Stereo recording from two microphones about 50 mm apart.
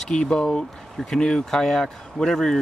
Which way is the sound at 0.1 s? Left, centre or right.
Centre.